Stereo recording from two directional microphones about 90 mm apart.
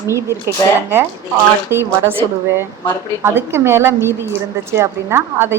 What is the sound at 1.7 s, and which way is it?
Speech, 25° right (ahead or behind).